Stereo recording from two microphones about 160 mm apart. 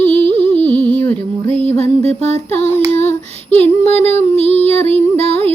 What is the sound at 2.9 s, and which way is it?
Female singing, 45° left (ahead or behind).